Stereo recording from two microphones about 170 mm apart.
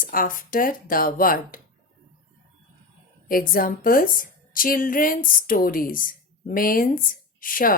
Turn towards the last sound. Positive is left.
turn(degrees=55)  # may be behind; listen again after turning